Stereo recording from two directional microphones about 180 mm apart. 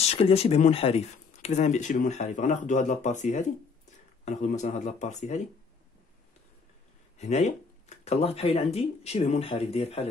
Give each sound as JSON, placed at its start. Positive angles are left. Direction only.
{"t": 0.0, "sound": "speech", "side_deg": 35}
{"t": 7.2, "sound": "speech", "side_deg": 40}